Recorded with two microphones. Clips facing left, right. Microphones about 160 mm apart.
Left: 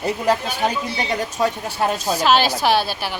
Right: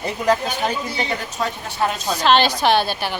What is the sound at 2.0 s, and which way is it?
A woman's voice, 5° left (ahead or behind).